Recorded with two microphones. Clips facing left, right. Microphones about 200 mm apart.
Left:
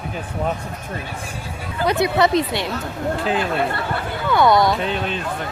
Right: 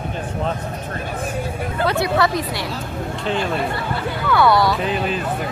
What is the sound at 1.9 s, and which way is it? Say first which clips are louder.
Speech: left 3 dB; 20° left (ahead or behind).